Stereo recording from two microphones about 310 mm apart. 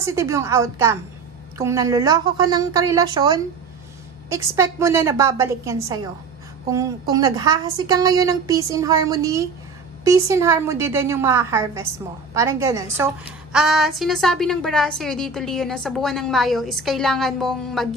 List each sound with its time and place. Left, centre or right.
0.0 s a woman's voice: centre